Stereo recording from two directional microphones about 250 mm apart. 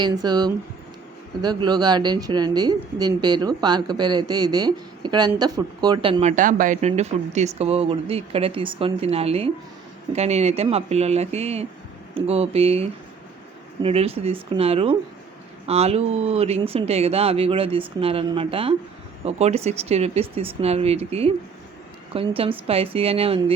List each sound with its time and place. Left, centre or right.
0.0 s speech: centre